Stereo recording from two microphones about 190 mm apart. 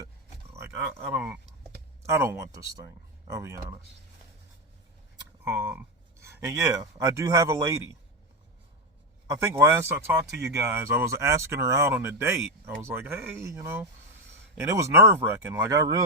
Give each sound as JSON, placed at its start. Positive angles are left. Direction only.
{"t": 0.5, "sound": "speech", "side_deg": -15}
{"t": 5.5, "sound": "speech", "side_deg": -10}
{"t": 9.2, "sound": "speech", "side_deg": -15}